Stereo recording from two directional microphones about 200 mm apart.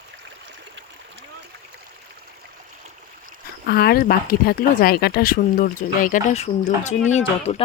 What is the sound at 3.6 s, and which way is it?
Speech, 50° left (ahead or behind).